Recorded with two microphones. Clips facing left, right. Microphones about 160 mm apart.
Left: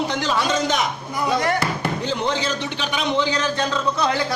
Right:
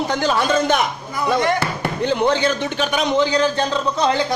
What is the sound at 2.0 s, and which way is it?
A man's voice, 60° right (ahead or behind).